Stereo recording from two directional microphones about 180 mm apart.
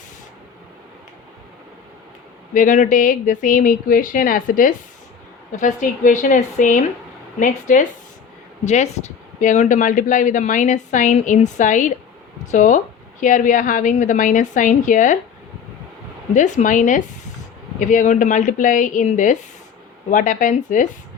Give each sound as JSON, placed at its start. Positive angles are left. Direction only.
{"t": 2.5, "sound": "speech", "side_deg": 45}
{"t": 16.3, "sound": "speech", "side_deg": 45}